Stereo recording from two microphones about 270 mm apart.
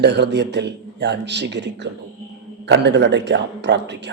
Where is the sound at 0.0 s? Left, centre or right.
Right.